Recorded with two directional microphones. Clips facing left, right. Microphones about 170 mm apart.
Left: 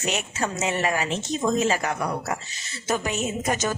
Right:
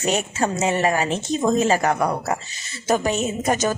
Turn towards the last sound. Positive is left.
turn(degrees=-35)  # may be behind; listen again after turning